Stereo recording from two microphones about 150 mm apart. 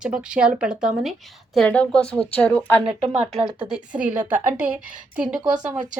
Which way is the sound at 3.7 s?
5° right (ahead or behind).